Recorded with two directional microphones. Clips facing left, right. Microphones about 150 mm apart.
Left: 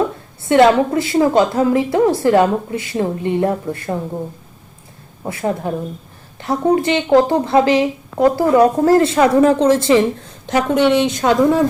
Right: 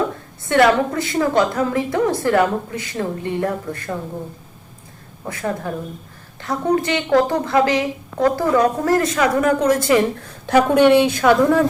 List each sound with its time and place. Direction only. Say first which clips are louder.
0.4 s speech: left 4 dB; 20° left (ahead or behind)
5.2 s speech: left 4 dB; 25° left (ahead or behind)
10.8 s a woman's voice: right 1 dB; 10° right (ahead or behind)
11.1 s speech: left 1 dB; 20° left (ahead or behind)